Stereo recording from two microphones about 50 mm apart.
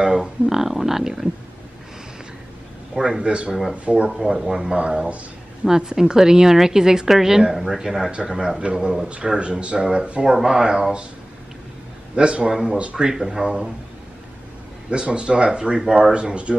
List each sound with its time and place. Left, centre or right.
0.0 s speech: centre
2.9 s speech: centre
4.1 s speech: centre
4.6 s speech: centre
5.7 s speech: centre
8.1 s speech: centre
12.2 s speech: centre
13.1 s speech: centre
14.9 s speech: right